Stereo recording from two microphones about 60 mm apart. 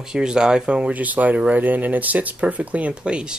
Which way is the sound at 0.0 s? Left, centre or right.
Centre.